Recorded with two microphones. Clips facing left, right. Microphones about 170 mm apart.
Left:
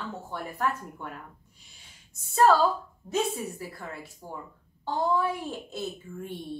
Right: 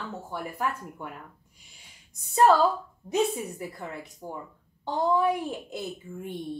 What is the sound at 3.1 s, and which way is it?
Speech, 20° right (ahead or behind).